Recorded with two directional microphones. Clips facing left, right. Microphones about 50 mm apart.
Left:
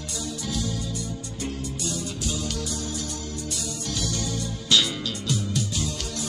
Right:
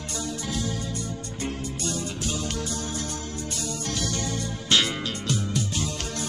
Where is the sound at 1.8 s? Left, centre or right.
Right.